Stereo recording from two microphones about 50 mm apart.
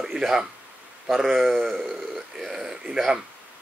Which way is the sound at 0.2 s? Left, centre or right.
Centre.